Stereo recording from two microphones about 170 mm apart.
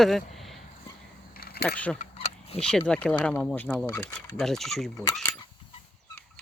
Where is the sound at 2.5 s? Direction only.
35° left (ahead or behind).